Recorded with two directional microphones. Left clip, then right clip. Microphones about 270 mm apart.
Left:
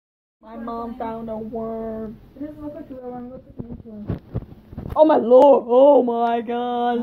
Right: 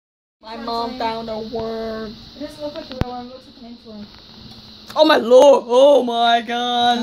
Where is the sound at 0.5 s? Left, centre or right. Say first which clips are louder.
Right 6 dB; centre.